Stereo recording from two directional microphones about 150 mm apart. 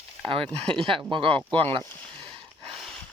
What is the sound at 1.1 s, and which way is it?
Speech, 35° right (ahead or behind).